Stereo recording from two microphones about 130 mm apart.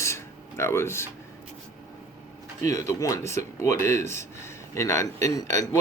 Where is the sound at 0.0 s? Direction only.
20° left (ahead or behind).